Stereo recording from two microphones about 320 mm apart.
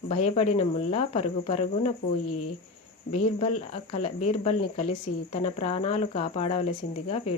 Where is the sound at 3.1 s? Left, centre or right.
Left.